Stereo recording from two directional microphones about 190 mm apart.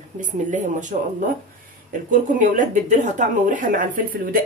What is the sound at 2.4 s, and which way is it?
Speech, 40° right (ahead or behind).